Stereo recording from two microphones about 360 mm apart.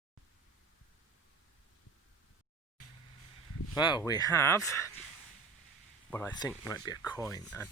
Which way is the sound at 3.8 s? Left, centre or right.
Centre.